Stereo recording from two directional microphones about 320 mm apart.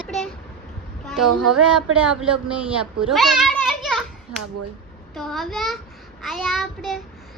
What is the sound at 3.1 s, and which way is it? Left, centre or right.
Children playing, centre.